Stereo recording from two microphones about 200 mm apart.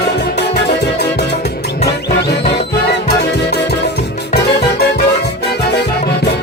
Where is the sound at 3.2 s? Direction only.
55° left (ahead or behind).